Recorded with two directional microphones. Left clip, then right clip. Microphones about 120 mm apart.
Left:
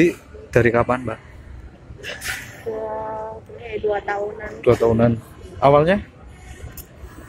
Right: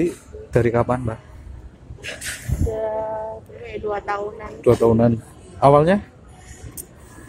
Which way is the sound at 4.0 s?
45° right (ahead or behind).